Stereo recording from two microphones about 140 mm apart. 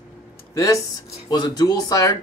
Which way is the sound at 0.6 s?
20° left (ahead or behind).